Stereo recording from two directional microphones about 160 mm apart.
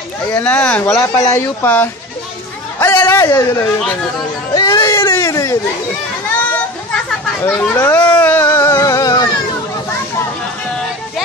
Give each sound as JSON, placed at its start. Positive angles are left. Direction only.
{"t": 0.3, "sound": "speech", "side_deg": 10}
{"t": 2.8, "sound": "a sound", "side_deg": 15}
{"t": 7.4, "sound": "speech", "side_deg": 15}